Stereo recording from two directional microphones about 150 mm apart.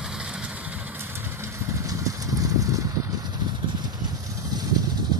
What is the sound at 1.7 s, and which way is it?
Vehicle, 20° right (ahead or behind).